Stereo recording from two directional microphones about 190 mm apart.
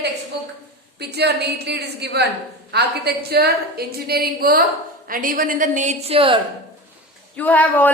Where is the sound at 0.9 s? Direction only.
60° right (ahead or behind); by 6.4 s 30° right (ahead or behind).